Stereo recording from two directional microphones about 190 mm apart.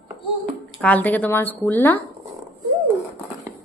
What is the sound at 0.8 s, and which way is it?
A woman's voice, 10° left (ahead or behind).